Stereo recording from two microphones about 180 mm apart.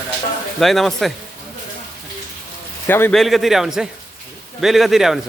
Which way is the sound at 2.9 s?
10° left (ahead or behind).